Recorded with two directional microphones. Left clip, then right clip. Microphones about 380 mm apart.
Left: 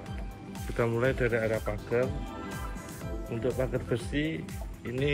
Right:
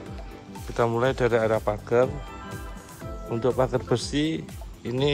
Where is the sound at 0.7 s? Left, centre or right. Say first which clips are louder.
Right 5 dB; centre.